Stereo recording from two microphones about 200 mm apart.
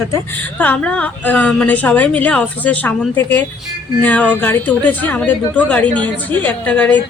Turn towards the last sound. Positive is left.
turn(degrees=5)  # may be behind; listen again after turning